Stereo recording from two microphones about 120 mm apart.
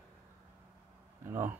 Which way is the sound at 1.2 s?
20° right (ahead or behind).